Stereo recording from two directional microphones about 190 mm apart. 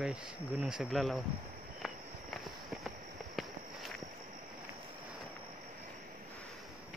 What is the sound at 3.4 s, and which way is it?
Walk, centre (ahead or behind).